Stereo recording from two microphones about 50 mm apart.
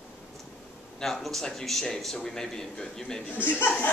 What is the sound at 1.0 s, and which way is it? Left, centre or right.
Speech, centre.